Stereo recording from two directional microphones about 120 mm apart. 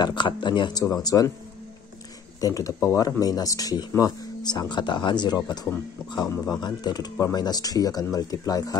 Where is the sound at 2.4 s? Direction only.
30° left (ahead or behind).